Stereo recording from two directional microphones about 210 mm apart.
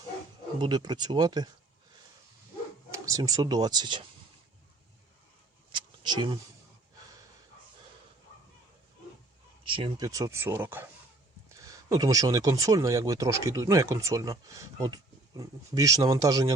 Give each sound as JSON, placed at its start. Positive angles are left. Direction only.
{"t": 0.6, "sound": "speech", "side_deg": -20}
{"t": 2.9, "sound": "speech", "side_deg": -15}
{"t": 5.7, "sound": "a sound", "side_deg": -20}
{"t": 9.6, "sound": "speech", "side_deg": -25}